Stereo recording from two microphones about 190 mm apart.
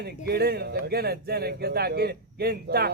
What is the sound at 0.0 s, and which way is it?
Speech, 55° right (ahead or behind).